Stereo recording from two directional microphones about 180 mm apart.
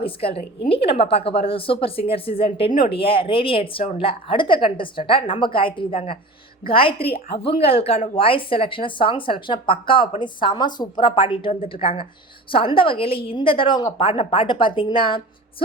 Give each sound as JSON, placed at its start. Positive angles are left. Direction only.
{"t": 0.0, "sound": "a woman's voice", "side_deg": 30}